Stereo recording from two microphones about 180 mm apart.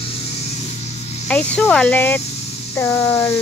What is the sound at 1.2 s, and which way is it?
Speech, 10° left (ahead or behind).